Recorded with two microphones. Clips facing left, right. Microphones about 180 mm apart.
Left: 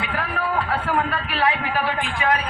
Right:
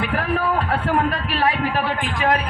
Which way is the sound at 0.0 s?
45° right (ahead or behind).